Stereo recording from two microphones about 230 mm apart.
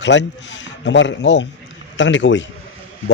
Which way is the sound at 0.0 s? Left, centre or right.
Left.